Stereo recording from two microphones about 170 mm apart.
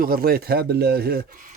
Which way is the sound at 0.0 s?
60° right (ahead or behind).